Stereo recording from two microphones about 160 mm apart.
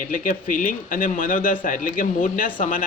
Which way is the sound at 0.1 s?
55° left (ahead or behind).